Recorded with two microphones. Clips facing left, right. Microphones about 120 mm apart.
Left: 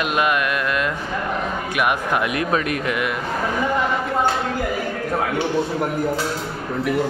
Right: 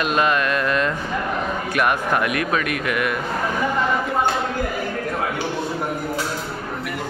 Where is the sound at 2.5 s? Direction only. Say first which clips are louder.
Left 1 dB; 30° left (ahead or behind).